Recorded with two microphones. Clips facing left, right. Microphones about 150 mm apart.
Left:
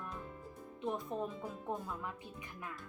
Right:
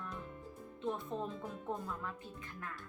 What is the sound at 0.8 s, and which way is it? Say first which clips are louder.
Speech: left 1 dB; 10° left (ahead or behind).